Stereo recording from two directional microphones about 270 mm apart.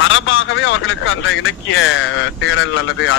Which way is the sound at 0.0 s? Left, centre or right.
Left.